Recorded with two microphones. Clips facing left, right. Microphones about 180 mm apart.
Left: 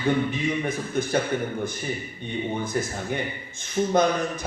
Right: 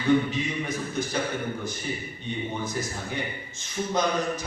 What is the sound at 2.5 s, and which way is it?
A man's voice, 55° left (ahead or behind).